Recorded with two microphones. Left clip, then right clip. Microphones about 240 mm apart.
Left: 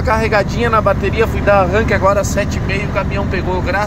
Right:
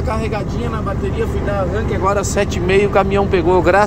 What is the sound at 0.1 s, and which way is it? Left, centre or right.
Speech, centre.